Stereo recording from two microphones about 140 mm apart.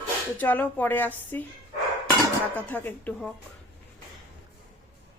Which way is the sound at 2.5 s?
15° left (ahead or behind).